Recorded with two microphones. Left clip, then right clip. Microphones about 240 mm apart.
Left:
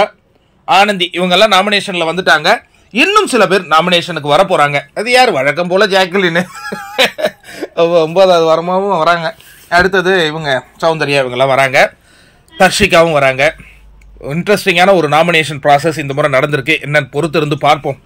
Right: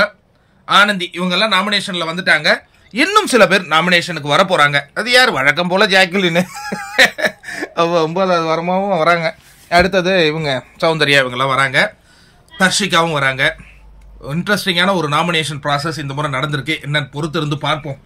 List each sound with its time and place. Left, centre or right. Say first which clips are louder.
0.7 s speech: left 2 dB; centre
2.1 s a man's voice: left 3 dB; right
8.2 s a man's voice: left 7 dB; right
8.7 s a man's voice: left 3 dB; centre